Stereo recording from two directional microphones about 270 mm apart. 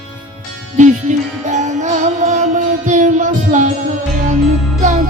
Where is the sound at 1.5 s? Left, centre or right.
Right.